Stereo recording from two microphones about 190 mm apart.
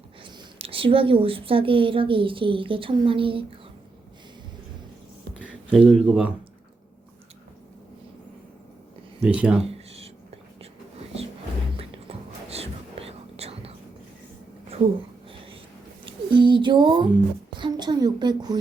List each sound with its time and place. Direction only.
0.2 s a woman's voice: 25° right (ahead or behind)
5.5 s speech: 5° right (ahead or behind)
9.2 s speech: 5° right (ahead or behind)
9.6 s a sound: 30° right (ahead or behind)
11.8 s whispering: 30° right (ahead or behind)
16.3 s music: 25° right (ahead or behind)
17.5 s a woman's voice: 25° right (ahead or behind)